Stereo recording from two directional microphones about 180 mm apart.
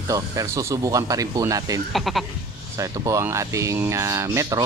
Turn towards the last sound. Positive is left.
turn(degrees=-20)  # may be behind; listen again after turning